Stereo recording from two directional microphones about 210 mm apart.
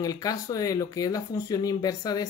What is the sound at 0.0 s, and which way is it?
Speech, 15° left (ahead or behind).